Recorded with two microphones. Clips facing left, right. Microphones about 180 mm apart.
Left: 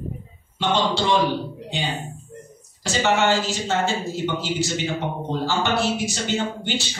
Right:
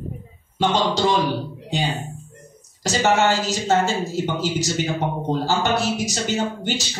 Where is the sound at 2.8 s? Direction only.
40° right (ahead or behind).